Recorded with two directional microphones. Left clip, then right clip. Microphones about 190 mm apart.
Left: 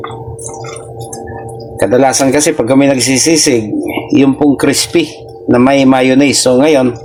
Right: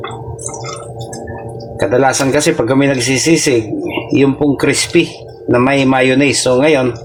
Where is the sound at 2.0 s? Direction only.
20° left (ahead or behind).